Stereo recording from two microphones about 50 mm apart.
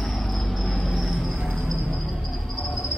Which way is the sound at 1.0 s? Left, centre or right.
Centre.